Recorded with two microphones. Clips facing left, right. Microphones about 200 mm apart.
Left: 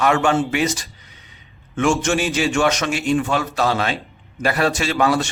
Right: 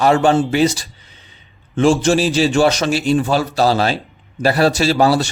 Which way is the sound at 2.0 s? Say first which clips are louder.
Right 5 dB; 35° right (ahead or behind).